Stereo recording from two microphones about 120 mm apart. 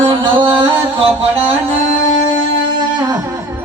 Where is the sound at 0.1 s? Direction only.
45° right (ahead or behind).